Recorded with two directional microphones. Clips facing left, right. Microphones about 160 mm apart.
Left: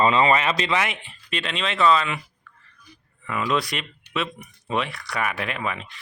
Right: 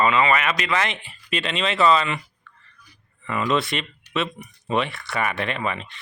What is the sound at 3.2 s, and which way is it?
Speech, centre (ahead or behind).